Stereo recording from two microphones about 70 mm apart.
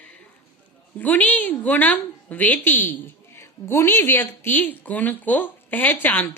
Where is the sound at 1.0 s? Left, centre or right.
Left.